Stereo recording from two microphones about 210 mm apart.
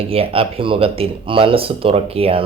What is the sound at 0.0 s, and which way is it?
Speech, 25° right (ahead or behind).